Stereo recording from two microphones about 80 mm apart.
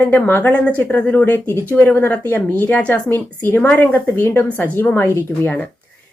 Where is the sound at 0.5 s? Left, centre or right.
Centre.